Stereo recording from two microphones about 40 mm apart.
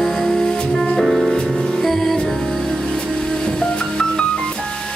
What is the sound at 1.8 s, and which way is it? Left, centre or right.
Music, centre.